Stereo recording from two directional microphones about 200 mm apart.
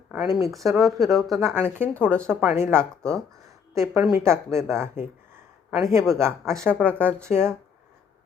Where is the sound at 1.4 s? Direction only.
10° right (ahead or behind).